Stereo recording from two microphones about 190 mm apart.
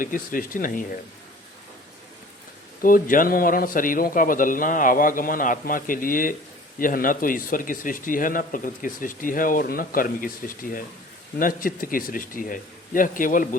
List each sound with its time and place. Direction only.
0.0 s speech: 45° left (ahead or behind)
2.8 s speech: 45° left (ahead or behind)